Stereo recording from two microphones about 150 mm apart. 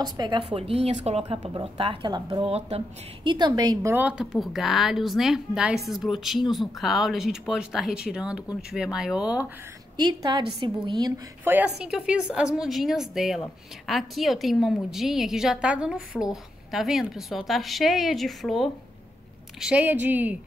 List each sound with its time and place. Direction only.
0.0 s a woman's voice: 30° right (ahead or behind)
0.5 s a woman's voice: 40° right (ahead or behind)
2.4 s a woman's voice: 45° right (ahead or behind)
3.3 s a woman's voice: 30° right (ahead or behind)
3.9 s a woman's voice: 10° right (ahead or behind)
9.9 s a woman's voice: 30° right (ahead or behind)
11.4 s a woman's voice: 10° right (ahead or behind)